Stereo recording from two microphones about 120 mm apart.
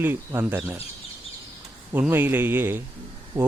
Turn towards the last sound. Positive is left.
turn(degrees=-15)  # may be behind; listen again after turning